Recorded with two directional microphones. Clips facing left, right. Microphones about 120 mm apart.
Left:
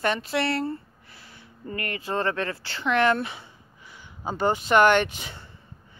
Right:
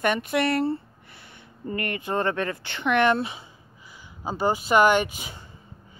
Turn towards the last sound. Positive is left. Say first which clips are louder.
# left 1 dB
turn(degrees=-10)  # may be behind; listen again after turning